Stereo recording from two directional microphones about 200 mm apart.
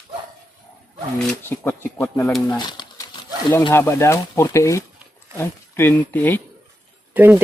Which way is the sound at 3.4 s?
15° left (ahead or behind).